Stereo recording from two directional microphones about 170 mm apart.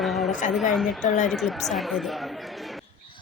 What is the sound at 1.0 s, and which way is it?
Speech, 45° left (ahead or behind).